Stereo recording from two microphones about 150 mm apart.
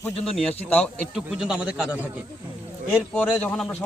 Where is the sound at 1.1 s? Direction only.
5° right (ahead or behind).